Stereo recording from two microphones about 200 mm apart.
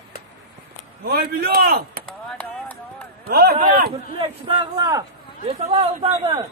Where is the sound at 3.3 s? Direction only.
50° right (ahead or behind).